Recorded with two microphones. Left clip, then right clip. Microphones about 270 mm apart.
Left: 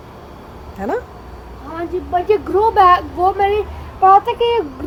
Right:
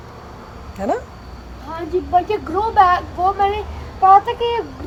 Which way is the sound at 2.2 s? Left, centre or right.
Left.